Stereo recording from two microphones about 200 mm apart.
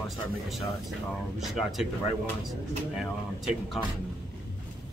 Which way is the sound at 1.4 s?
Centre (ahead or behind).